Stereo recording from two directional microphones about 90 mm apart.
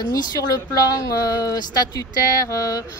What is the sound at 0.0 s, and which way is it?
Speech, 50° left (ahead or behind).